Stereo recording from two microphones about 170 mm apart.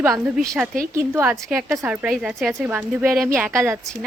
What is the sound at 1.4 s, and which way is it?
A woman's voice, centre (ahead or behind).